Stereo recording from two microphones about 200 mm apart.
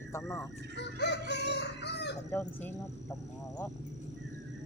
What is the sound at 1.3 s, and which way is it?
Chicken, 60° left (ahead or behind).